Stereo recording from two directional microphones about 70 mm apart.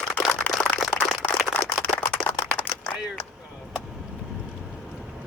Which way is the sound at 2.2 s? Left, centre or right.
Centre.